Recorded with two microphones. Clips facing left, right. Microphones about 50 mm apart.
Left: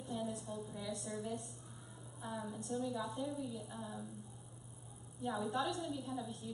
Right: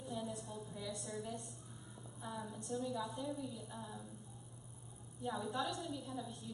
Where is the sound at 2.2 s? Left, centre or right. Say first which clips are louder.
Left 2 dB; centre.